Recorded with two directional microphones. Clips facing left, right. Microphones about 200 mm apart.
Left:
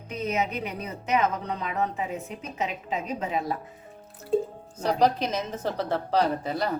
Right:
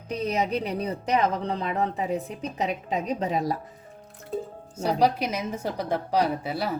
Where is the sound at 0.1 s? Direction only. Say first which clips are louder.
Right 2 dB; 35° right (ahead or behind).